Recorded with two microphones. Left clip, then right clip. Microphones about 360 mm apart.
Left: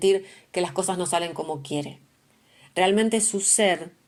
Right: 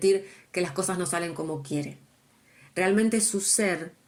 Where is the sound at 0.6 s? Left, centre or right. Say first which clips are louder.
Left 3 dB; left.